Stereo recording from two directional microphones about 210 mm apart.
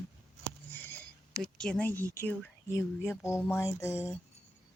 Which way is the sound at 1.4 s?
5° left (ahead or behind).